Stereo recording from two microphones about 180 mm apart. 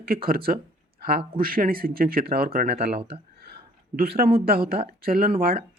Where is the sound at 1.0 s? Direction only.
60° right (ahead or behind).